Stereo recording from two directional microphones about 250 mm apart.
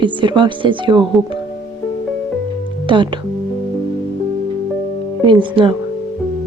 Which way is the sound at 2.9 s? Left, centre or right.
Centre.